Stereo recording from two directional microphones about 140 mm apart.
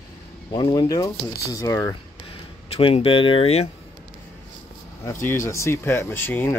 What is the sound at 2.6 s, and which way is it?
Speech, 45° left (ahead or behind).